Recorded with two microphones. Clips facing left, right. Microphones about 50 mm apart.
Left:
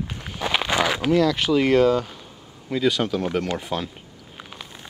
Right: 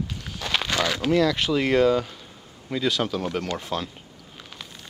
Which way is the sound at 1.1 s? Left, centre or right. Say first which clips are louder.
Left 2 dB; centre.